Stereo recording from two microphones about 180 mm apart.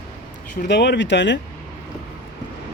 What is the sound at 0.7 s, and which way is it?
Speech, 75° left (ahead or behind).